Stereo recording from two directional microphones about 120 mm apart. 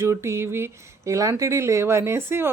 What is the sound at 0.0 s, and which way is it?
Speech, 20° right (ahead or behind).